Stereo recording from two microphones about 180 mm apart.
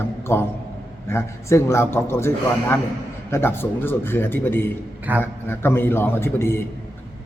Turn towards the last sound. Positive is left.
turn(degrees=15)  # may be behind; listen again after turning